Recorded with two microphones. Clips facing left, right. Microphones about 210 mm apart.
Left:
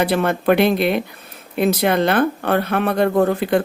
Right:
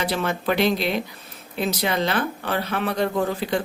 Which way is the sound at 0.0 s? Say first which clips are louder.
Left 7 dB; 55° left (ahead or behind).